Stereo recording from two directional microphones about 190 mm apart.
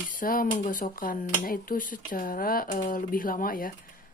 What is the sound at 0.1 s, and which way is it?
Speech, 45° left (ahead or behind).